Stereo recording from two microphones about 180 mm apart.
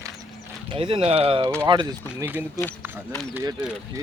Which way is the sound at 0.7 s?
30° right (ahead or behind).